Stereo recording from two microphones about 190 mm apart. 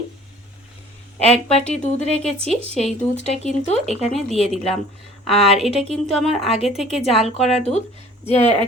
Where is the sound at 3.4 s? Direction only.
35° left (ahead or behind).